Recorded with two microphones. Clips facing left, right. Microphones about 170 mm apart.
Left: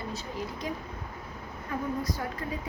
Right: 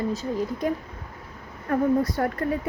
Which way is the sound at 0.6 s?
55° right (ahead or behind).